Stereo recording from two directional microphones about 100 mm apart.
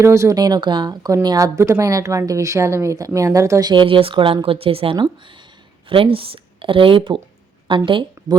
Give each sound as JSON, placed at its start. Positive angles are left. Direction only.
{"t": 0.0, "sound": "a woman's voice", "side_deg": -30}
{"t": 3.7, "sound": "speech", "side_deg": -55}
{"t": 4.4, "sound": "a woman's voice", "side_deg": -70}